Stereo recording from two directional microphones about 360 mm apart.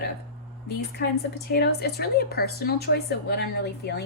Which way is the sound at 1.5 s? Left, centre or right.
Left.